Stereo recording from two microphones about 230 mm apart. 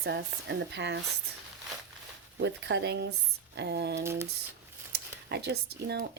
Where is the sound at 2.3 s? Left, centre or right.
Right.